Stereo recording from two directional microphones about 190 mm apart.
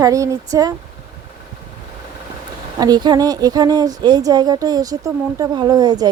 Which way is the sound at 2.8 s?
20° right (ahead or behind).